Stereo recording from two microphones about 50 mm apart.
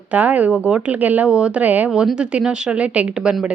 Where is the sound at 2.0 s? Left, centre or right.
Centre.